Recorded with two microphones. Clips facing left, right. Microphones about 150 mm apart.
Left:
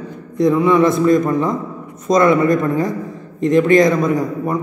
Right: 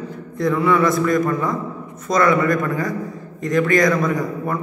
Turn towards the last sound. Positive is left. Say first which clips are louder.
# left 4 dB
turn(degrees=20)  # may be behind; listen again after turning